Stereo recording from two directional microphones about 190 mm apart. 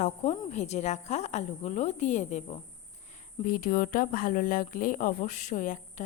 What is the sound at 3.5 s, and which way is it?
Speech, 50° left (ahead or behind).